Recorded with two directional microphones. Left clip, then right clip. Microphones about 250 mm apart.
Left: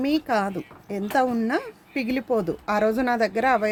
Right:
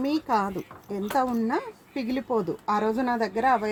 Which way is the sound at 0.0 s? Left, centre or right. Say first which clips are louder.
Left 2 dB; left.